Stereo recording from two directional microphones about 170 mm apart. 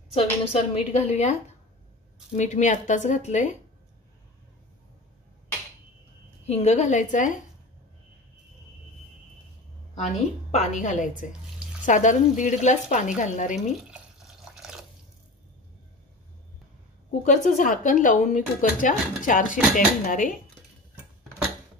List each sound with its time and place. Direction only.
0.1 s a woman's voice: 35° left (ahead or behind)
2.3 s speech: 45° left (ahead or behind)
6.4 s speech: 40° left (ahead or behind)
10.5 s speech: 45° left (ahead or behind)
13.7 s drip: 5° right (ahead or behind)
17.2 s speech: 50° left (ahead or behind)